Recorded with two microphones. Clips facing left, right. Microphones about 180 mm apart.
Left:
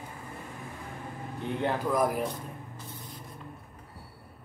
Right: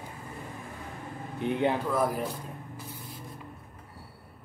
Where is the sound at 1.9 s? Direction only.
10° left (ahead or behind).